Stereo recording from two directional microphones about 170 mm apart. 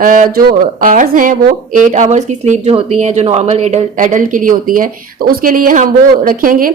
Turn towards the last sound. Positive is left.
turn(degrees=-55)  # may be behind; listen again after turning